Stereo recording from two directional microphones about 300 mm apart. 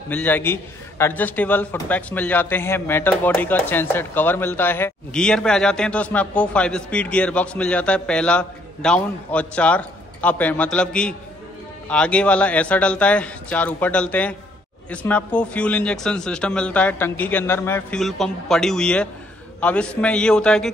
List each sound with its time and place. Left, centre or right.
0.1 s a man's voice: centre